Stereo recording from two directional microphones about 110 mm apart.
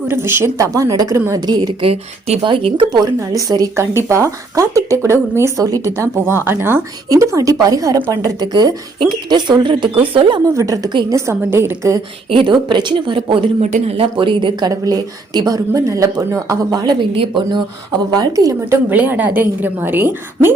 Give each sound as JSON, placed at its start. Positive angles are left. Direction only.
{"t": 0.1, "sound": "speech", "side_deg": -20}
{"t": 1.8, "sound": "speech", "side_deg": -65}
{"t": 2.4, "sound": "speech", "side_deg": -50}
{"t": 3.0, "sound": "speech", "side_deg": -35}
{"t": 10.4, "sound": "speech", "side_deg": -30}
{"t": 12.3, "sound": "speech", "side_deg": -50}
{"t": 13.6, "sound": "speech", "side_deg": -70}
{"t": 14.7, "sound": "speech", "side_deg": -35}
{"t": 17.2, "sound": "speech", "side_deg": -45}
{"t": 18.1, "sound": "speech", "side_deg": -35}
{"t": 18.9, "sound": "a woman's voice", "side_deg": -15}